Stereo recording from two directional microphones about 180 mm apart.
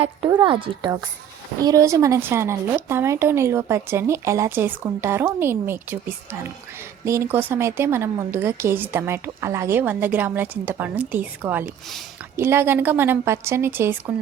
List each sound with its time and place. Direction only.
0.4 s speech: 25° right (ahead or behind); by 14.0 s 10° right (ahead or behind)